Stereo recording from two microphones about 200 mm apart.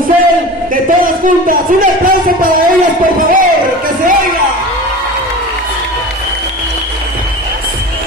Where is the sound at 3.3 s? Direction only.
45° right (ahead or behind).